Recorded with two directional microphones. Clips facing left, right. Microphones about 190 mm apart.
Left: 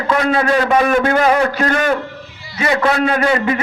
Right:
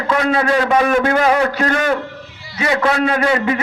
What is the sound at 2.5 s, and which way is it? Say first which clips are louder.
Speech: left 1 dB; 45° left (ahead or behind).